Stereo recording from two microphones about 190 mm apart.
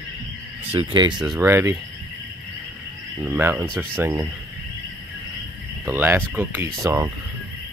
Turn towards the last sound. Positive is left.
turn(degrees=-15)  # may be behind; listen again after turning